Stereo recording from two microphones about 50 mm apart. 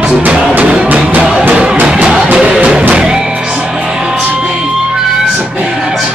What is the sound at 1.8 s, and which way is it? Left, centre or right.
Music, centre.